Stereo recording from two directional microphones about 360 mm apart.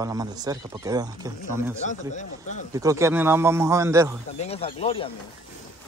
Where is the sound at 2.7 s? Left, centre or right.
Centre.